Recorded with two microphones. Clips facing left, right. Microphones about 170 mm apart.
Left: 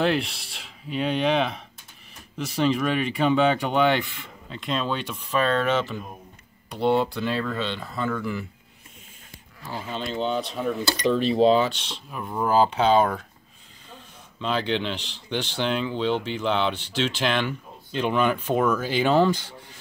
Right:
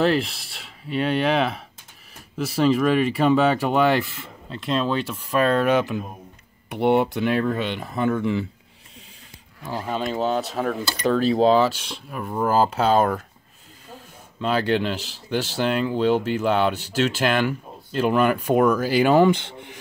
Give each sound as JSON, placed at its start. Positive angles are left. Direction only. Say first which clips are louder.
{"t": 0.0, "sound": "speech", "louder": "right 3 dB", "side_deg": 0}
{"t": 9.7, "sound": "speech", "louder": "right 5 dB", "side_deg": -45}
{"t": 10.6, "sound": "speech", "louder": "right 1 dB", "side_deg": -70}
{"t": 11.7, "sound": "speech", "louder": "right 3 dB", "side_deg": -5}
{"t": 14.4, "sound": "speech", "louder": "right 4 dB", "side_deg": -5}
{"t": 19.3, "sound": "speech", "louder": "right 4 dB", "side_deg": -25}